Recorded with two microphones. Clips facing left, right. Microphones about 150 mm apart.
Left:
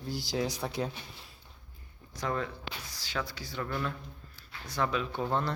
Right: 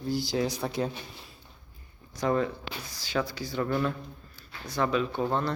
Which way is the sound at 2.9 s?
Centre (ahead or behind).